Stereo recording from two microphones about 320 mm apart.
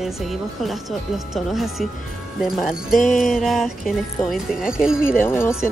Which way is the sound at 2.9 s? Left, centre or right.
Left.